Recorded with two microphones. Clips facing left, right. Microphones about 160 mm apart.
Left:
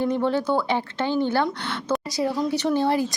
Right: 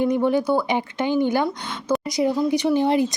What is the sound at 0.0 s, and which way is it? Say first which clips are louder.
Speech: right 3 dB; 15° right (ahead or behind).